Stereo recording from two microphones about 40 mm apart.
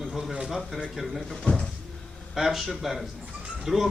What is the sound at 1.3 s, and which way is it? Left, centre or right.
Speech, centre.